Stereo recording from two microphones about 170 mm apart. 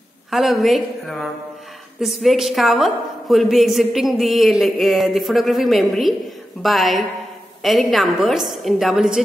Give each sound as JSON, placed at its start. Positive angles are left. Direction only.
{"t": 0.3, "sound": "a woman's voice", "side_deg": 0}